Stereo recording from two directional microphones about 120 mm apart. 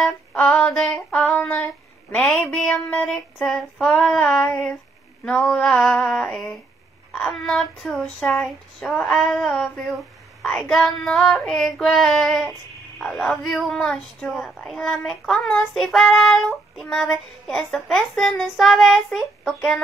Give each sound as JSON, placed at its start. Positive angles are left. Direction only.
{"t": 0.0, "sound": "female singing", "side_deg": 5}
{"t": 2.5, "sound": "speech", "side_deg": 5}